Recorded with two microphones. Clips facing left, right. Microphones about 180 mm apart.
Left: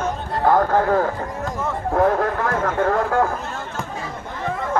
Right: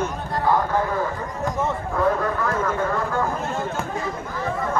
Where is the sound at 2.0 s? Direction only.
55° left (ahead or behind).